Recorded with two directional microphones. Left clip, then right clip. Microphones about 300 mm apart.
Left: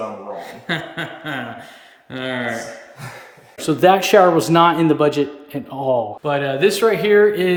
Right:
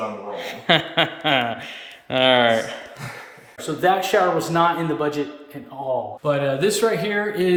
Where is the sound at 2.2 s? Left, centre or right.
Right.